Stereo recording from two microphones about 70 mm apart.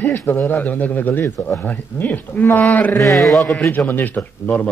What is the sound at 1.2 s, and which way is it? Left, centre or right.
Speech, left.